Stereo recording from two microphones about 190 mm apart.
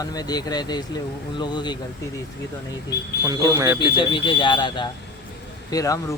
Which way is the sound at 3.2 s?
15° right (ahead or behind).